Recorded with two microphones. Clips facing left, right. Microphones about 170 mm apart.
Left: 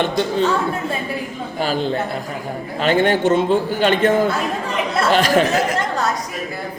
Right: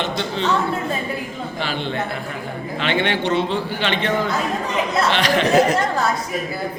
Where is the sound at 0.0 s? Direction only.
45° left (ahead or behind).